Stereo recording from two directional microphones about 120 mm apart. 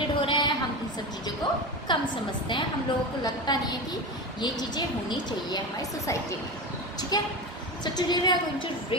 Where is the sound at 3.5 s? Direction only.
35° left (ahead or behind).